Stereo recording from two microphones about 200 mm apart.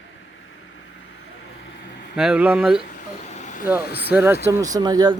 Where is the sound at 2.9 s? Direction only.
40° left (ahead or behind).